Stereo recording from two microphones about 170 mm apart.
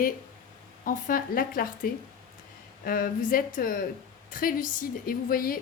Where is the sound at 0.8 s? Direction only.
55° left (ahead or behind).